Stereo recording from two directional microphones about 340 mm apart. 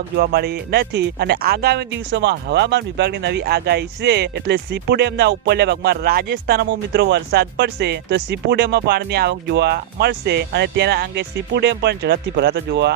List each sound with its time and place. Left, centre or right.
0.2 s speech: right